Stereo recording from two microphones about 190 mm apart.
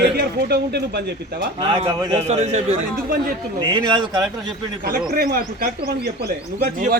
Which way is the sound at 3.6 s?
20° right (ahead or behind).